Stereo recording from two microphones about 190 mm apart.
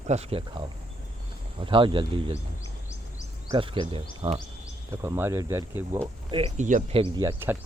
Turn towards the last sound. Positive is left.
turn(degrees=-15)  # may be behind; listen again after turning